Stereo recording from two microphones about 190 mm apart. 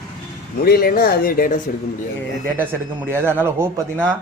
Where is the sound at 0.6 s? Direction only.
55° left (ahead or behind).